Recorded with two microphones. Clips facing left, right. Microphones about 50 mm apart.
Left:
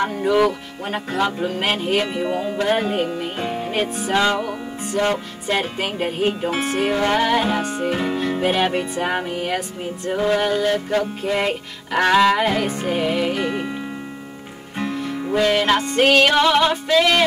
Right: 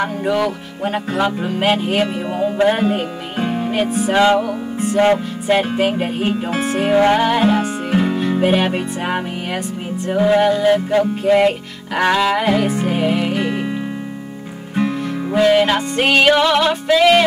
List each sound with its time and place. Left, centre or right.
0.0 s music: centre
3.4 s music: centre
3.7 s music: centre
4.1 s music: centre
5.6 s music: centre
6.9 s music: centre
14.8 s music: centre